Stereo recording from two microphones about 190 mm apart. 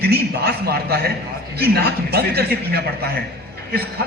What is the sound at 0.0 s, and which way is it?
A man's voice, 55° right (ahead or behind).